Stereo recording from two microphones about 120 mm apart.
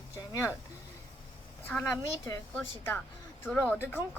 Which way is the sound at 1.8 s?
25° left (ahead or behind).